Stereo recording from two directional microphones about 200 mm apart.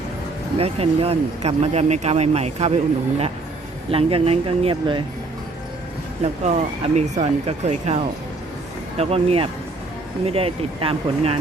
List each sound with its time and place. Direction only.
0.6 s speech: 30° right (ahead or behind)
3.9 s speech: 30° right (ahead or behind)
6.4 s speech: 35° right (ahead or behind)
9.0 s speech: 30° right (ahead or behind)